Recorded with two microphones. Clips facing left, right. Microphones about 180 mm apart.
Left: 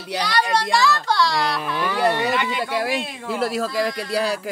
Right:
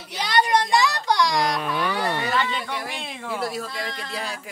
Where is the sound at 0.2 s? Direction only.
20° right (ahead or behind).